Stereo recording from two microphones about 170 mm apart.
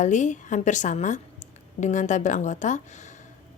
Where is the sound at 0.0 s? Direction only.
45° left (ahead or behind).